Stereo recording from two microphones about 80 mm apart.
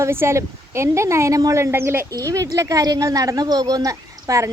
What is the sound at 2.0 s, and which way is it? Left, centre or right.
Speech, right.